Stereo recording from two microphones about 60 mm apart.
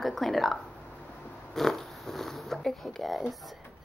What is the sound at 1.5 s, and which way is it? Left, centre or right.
Zipper, centre.